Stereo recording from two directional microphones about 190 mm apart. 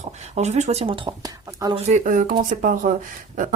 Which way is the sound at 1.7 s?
40° right (ahead or behind).